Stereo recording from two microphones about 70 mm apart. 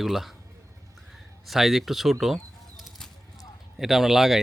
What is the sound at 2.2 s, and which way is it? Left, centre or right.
Bird flight, centre.